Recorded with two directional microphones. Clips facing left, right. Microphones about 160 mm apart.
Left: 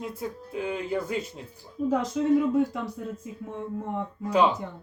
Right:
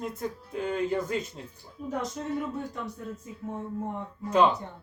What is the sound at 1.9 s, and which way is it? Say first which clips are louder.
Speech: left 8 dB; 90° left.